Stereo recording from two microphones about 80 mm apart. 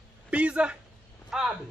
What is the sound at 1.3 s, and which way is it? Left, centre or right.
Speech, centre.